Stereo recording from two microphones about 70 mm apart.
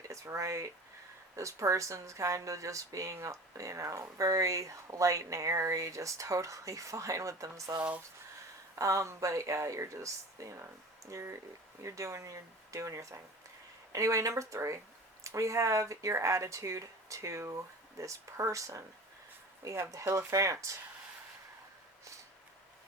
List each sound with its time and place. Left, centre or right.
0.1 s speech: right
8.7 s speech: right